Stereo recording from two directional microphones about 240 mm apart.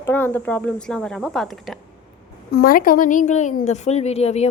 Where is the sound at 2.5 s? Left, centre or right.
Left.